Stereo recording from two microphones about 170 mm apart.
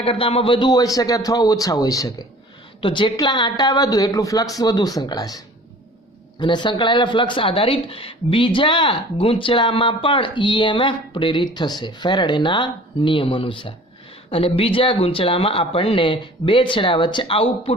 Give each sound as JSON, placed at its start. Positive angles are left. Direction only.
{"t": 0.0, "sound": "speech", "side_deg": 35}
{"t": 6.4, "sound": "speech", "side_deg": 25}